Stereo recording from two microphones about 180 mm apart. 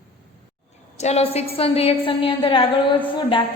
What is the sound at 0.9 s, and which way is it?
A woman's voice, 35° left (ahead or behind).